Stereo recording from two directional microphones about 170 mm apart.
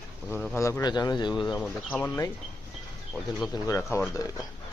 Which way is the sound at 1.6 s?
5° left (ahead or behind).